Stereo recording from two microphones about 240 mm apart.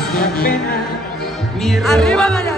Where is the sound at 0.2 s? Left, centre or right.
Left.